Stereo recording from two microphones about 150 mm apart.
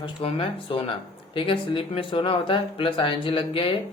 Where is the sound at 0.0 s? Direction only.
40° left (ahead or behind).